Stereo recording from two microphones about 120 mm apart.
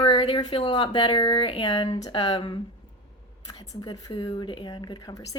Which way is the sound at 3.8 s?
40° left (ahead or behind).